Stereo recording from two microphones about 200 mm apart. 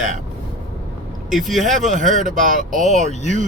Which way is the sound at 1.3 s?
Centre (ahead or behind).